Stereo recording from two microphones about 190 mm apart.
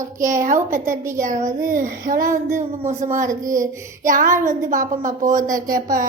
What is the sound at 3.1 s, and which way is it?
Speech, 45° right (ahead or behind).